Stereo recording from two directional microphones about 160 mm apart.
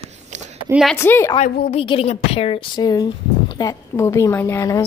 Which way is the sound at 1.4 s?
45° left (ahead or behind).